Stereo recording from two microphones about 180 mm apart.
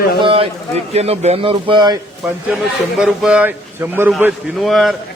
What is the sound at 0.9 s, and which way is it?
A man's voice, 35° right (ahead or behind).